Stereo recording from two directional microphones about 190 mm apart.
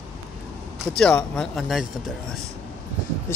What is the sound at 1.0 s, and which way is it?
Speech, 5° left (ahead or behind).